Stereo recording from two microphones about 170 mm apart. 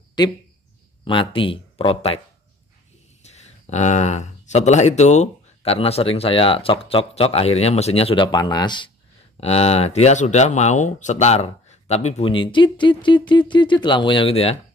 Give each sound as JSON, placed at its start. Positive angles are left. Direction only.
{"t": 0.2, "sound": "speech", "side_deg": 25}
{"t": 3.2, "sound": "speech", "side_deg": 40}
{"t": 8.3, "sound": "speech", "side_deg": 25}
{"t": 9.4, "sound": "speech", "side_deg": 35}